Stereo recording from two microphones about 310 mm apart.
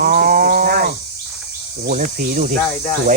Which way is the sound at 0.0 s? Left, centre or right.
Right.